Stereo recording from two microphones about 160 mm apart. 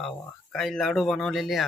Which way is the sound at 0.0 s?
Centre (ahead or behind).